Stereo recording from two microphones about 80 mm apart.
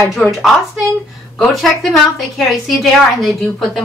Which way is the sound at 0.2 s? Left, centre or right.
Centre.